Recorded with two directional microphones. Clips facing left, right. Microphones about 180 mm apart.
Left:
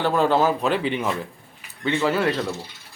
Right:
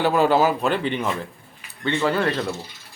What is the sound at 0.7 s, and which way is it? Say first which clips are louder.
Speech: even; 5° left (ahead or behind).